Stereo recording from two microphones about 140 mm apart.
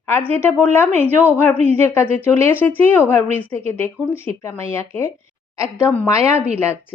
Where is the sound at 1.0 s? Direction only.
15° right (ahead or behind).